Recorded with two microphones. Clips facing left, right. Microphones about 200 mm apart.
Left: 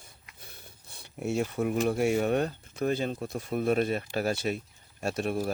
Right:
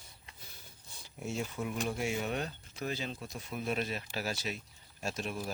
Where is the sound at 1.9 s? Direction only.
55° left (ahead or behind).